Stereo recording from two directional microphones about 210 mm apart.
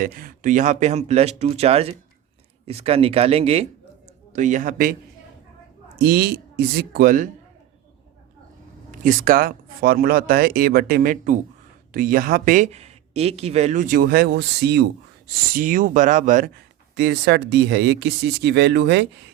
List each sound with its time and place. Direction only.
0.0 s speech: 40° right (ahead or behind)
6.0 s speech: 50° right (ahead or behind)
8.9 s speech: 40° right (ahead or behind)
15.5 s speech: 40° right (ahead or behind)